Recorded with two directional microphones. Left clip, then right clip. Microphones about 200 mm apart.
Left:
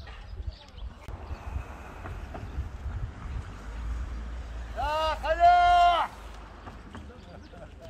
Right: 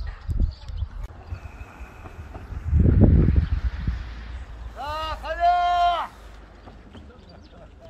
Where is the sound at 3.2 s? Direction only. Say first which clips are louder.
Right 14 dB; 55° left (ahead or behind).